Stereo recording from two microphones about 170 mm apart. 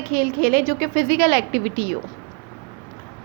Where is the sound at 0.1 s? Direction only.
60° right (ahead or behind).